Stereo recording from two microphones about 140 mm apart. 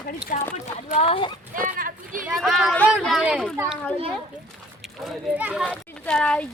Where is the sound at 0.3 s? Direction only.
70° left (ahead or behind).